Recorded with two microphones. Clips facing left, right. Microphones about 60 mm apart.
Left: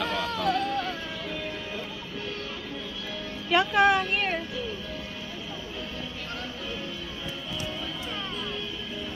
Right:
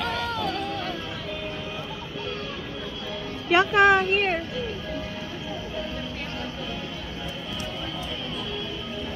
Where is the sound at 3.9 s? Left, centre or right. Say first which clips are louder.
Right 4 dB; right.